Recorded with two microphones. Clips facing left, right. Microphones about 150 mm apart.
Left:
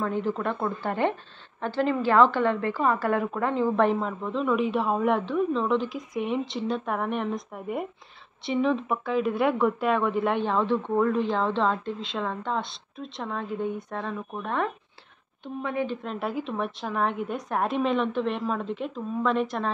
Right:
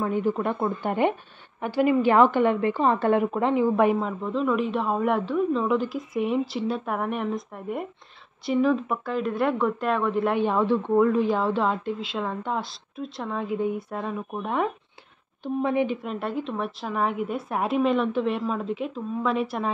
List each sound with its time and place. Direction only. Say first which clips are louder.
0.0 s a woman's voice: right 3 dB; 15° right (ahead or behind)
10.4 s a woman's voice: right 2 dB; 10° right (ahead or behind)
15.4 s a woman's voice: right 5 dB; 25° right (ahead or behind)
15.9 s a woman's voice: right 2 dB; 5° right (ahead or behind)